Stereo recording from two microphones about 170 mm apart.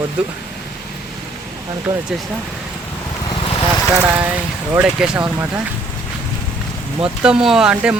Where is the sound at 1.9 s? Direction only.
25° right (ahead or behind).